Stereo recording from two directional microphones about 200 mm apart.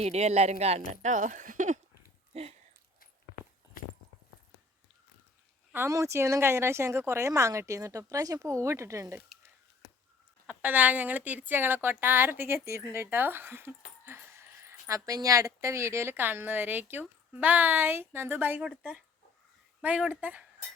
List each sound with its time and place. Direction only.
0.0 s speech: 30° right (ahead or behind)
2.3 s a sound: 30° right (ahead or behind)
3.3 s walk: 45° left (ahead or behind)
5.7 s speech: 15° right (ahead or behind)
10.4 s speech: 10° right (ahead or behind)